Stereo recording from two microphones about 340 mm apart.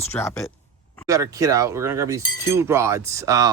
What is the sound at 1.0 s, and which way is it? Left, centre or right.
Speech, centre.